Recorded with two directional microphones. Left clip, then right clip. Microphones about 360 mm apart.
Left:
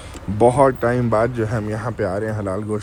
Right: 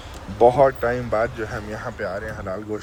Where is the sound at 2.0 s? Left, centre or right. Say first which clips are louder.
Left 6 dB; left.